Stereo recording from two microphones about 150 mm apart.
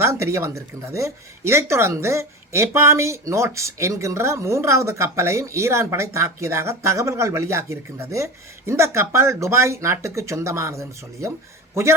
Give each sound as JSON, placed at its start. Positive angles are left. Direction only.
{"t": 0.0, "sound": "a man's voice", "side_deg": -20}